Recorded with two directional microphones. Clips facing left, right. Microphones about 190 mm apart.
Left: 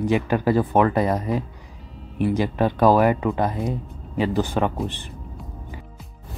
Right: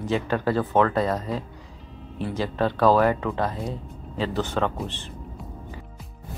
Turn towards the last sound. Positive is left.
turn(degrees=15)  # may be behind; listen again after turning